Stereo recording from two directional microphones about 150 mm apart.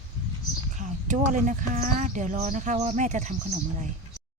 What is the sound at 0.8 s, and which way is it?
Speech, 55° right (ahead or behind).